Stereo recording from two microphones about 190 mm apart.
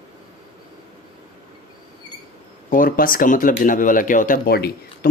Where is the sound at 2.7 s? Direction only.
45° left (ahead or behind).